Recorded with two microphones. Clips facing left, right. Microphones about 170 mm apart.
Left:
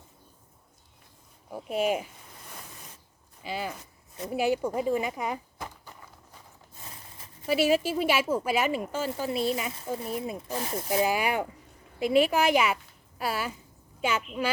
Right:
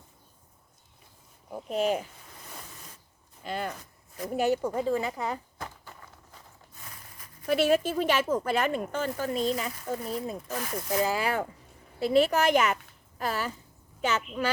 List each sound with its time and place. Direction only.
1.5 s speech: 5° left (ahead or behind)
3.4 s speech: 5° left (ahead or behind)
5.5 s a sound: 10° left (ahead or behind)
6.8 s a sound: 25° left (ahead or behind)
7.4 s speech: 5° left (ahead or behind)
10.5 s speech: 25° left (ahead or behind)
10.9 s speech: 15° left (ahead or behind)